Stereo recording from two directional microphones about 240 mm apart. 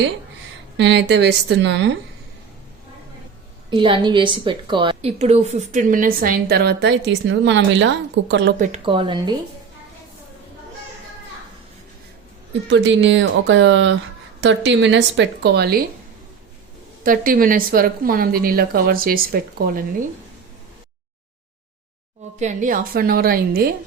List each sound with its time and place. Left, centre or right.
0.8 s a woman's voice: right
3.7 s a woman's voice: centre; by 8.5 s right
8.5 s a woman's voice: right
8.8 s a woman's voice: right
12.7 s a woman's voice: right
17.0 s a woman's voice: right
22.4 s a woman's voice: right